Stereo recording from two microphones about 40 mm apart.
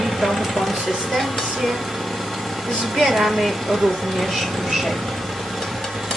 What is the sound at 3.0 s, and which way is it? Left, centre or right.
A woman's voice, centre.